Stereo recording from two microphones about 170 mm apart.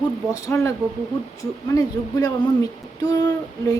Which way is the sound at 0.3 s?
20° left (ahead or behind).